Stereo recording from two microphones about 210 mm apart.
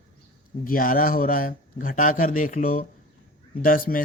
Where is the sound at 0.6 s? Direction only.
40° left (ahead or behind).